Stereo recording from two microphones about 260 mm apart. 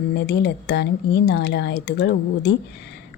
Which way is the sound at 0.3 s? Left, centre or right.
Left.